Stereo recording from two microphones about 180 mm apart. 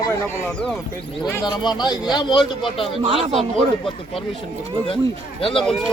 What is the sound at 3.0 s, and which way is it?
Speech, 30° right (ahead or behind).